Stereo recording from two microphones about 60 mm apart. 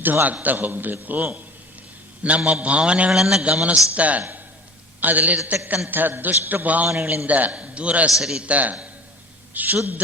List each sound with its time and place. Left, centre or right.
0.0 s a man's voice: right; by 3.4 s centre
3.4 s a man's voice: right
8.1 s a man's voice: centre
8.4 s a man's voice: right